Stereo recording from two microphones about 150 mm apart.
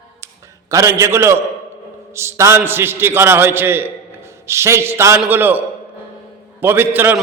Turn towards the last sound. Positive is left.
turn(degrees=-15)  # may be behind; listen again after turning